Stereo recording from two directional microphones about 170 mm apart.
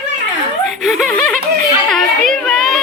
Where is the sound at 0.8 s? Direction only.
Centre (ahead or behind).